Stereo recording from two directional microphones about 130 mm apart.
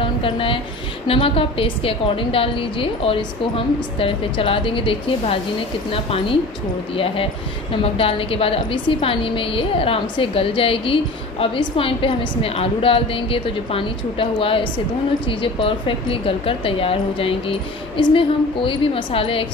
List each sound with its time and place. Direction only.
0.2 s a woman's voice: 45° left (ahead or behind)
7.7 s a woman's voice: 45° left (ahead or behind)